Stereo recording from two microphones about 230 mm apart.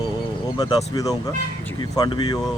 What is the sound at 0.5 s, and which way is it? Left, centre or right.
Speech, centre.